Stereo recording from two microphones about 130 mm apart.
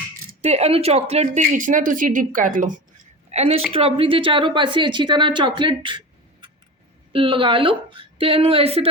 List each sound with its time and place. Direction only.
0.4 s speech: 55° right (ahead or behind); by 2.8 s 85° right
3.3 s a woman's voice: 50° right (ahead or behind)
7.1 s a woman's voice: 40° right (ahead or behind)